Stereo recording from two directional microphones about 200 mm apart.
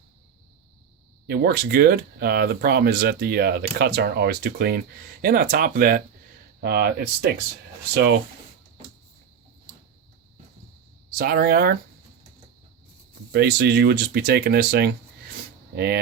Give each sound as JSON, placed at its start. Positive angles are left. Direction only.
{"t": 1.3, "sound": "speech", "side_deg": -55}
{"t": 6.6, "sound": "speech", "side_deg": -55}
{"t": 11.1, "sound": "speech", "side_deg": -45}
{"t": 13.3, "sound": "speech", "side_deg": -55}